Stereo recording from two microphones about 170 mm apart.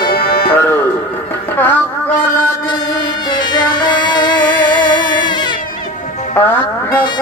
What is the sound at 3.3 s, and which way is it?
Music, 25° left (ahead or behind).